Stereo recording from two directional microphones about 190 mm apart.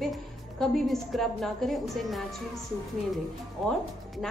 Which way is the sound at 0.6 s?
Centre (ahead or behind).